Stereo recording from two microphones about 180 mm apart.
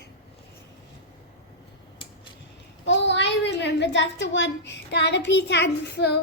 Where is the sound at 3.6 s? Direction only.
75° left (ahead or behind).